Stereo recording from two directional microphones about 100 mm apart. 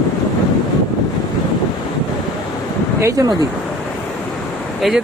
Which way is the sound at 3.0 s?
30° right (ahead or behind).